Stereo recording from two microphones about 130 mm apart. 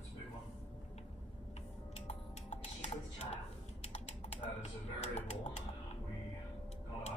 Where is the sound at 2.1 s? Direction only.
55° left (ahead or behind).